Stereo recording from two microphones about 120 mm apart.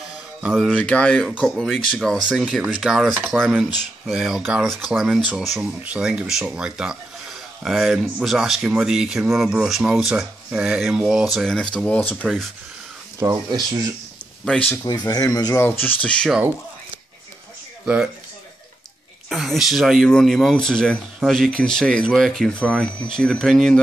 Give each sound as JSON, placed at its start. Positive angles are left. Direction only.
{"t": 0.4, "sound": "speech", "side_deg": -5}
{"t": 0.7, "sound": "speech", "side_deg": 10}
{"t": 4.4, "sound": "speech", "side_deg": -15}
{"t": 4.8, "sound": "speech", "side_deg": 0}
{"t": 11.3, "sound": "speech", "side_deg": 5}
{"t": 13.2, "sound": "speech", "side_deg": -35}
{"t": 14.9, "sound": "speech", "side_deg": 30}
{"t": 15.5, "sound": "speech", "side_deg": 20}
{"t": 19.2, "sound": "speech", "side_deg": 0}